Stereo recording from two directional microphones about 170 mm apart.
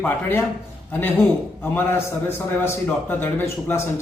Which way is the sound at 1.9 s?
15° left (ahead or behind).